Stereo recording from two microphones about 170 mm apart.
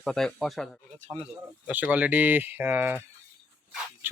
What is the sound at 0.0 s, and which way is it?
Speech, 5° left (ahead or behind).